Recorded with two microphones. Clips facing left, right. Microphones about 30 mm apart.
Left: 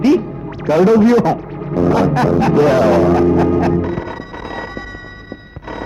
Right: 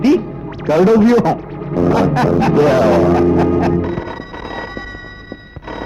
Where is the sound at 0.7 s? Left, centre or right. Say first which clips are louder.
Even; centre.